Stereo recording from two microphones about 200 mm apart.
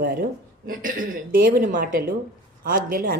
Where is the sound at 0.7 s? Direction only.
40° right (ahead or behind).